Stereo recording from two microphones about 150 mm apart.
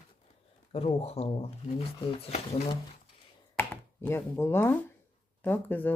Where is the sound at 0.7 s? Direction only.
45° left (ahead or behind).